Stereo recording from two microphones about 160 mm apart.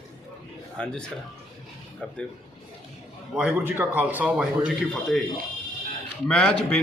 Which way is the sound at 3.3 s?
10° right (ahead or behind).